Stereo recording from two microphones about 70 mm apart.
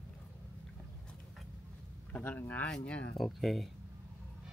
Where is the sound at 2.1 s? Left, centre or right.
Left.